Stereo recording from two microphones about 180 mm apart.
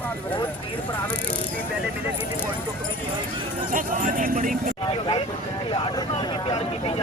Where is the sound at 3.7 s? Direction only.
45° right (ahead or behind).